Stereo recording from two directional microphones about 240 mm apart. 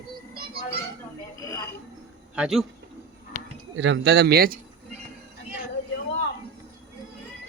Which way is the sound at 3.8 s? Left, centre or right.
Right.